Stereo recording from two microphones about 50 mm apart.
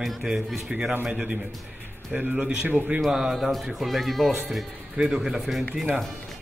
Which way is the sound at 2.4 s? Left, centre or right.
Right.